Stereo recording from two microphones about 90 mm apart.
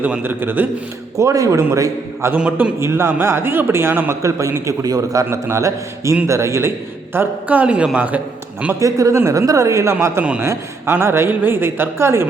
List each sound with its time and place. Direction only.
0.0 s speech: 20° right (ahead or behind)
1.1 s a man's voice: 40° right (ahead or behind)
2.3 s a man's voice: 15° right (ahead or behind)
2.8 s a man's voice: 30° right (ahead or behind)
8.8 s a man's voice: 35° right (ahead or behind)